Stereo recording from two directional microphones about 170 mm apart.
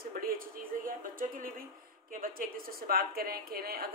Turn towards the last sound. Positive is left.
turn(degrees=-60)  # may be behind; listen again after turning